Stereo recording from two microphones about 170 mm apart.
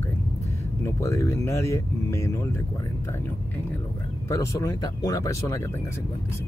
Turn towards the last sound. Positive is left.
turn(degrees=15)  # may be behind; listen again after turning